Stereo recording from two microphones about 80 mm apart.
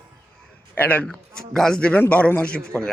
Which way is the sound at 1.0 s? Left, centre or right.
Centre.